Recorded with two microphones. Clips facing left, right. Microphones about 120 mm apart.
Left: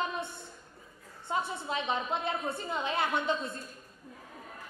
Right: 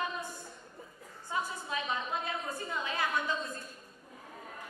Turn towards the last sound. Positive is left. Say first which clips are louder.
# left 3 dB
turn(degrees=25)  # may be behind; listen again after turning